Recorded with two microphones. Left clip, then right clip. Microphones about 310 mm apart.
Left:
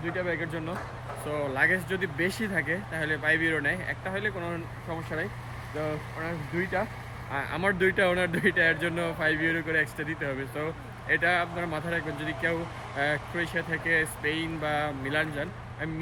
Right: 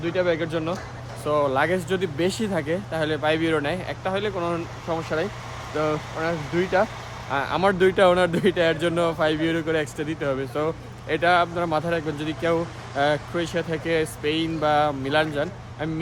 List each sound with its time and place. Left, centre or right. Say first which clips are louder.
0.0 s speech: right 8 dB; centre
4.4 s speech: right 8 dB; right
6.6 s speech: right 8 dB; centre